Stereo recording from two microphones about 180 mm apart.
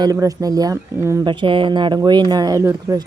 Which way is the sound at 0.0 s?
20° right (ahead or behind).